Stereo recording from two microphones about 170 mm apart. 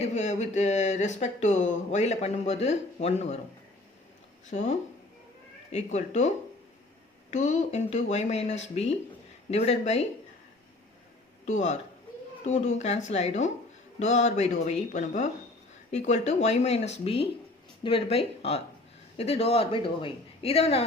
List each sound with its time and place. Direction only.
0.0 s speech: 45° left (ahead or behind)
4.5 s a woman's voice: 40° left (ahead or behind)
11.4 s a woman's voice: 45° left (ahead or behind)